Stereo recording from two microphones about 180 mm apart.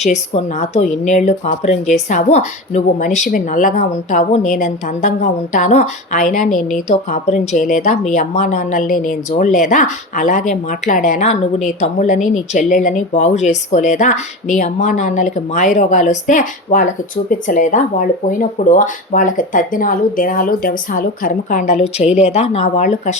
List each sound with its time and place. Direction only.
0.0 s speech: 40° left (ahead or behind)